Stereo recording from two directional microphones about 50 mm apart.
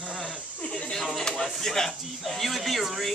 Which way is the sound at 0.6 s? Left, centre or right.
Centre.